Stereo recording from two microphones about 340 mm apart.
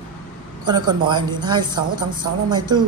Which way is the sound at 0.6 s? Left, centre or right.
Centre.